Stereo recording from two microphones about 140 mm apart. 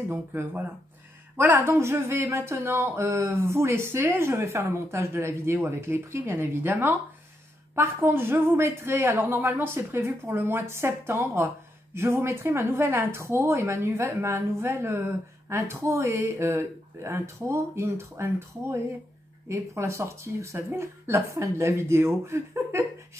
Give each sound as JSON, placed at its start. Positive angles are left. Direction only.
{"t": 0.1, "sound": "speech", "side_deg": -15}